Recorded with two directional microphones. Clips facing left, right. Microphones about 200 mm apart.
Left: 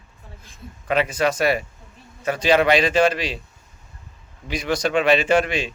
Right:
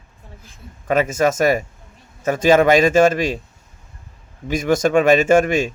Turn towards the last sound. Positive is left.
turn(degrees=-45)  # may be behind; listen again after turning